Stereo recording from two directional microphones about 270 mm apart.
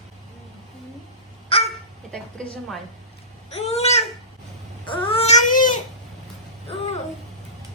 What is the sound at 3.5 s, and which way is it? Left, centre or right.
Babbling, left.